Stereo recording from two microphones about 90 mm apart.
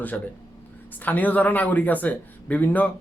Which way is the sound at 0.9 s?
20° left (ahead or behind).